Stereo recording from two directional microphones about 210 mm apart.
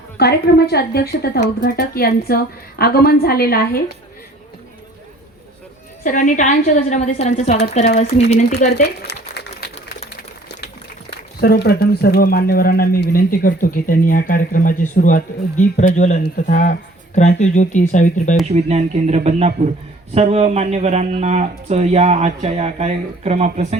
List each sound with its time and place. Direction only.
0.2 s speech: 50° left (ahead or behind)
6.0 s a woman's voice: 35° left (ahead or behind)
8.7 s a sound: 50° left (ahead or behind)
11.3 s a woman's voice: 45° left (ahead or behind)
18.5 s speech: 30° right (ahead or behind)